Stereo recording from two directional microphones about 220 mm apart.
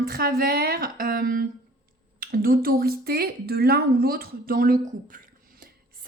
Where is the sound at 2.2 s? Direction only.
40° right (ahead or behind).